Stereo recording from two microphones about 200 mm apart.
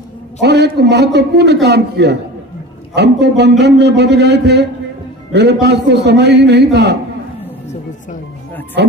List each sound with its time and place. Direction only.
0.4 s a man's voice: 55° right (ahead or behind)
8.8 s a man's voice: 60° right (ahead or behind)